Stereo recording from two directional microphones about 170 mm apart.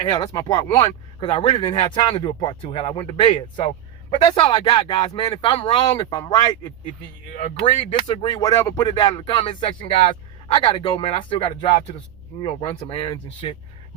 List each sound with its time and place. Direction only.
0.0 s speech: 25° left (ahead or behind)
7.6 s speech: 30° left (ahead or behind)